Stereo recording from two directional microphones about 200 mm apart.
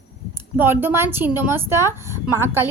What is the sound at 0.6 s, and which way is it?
A woman's voice, 10° right (ahead or behind).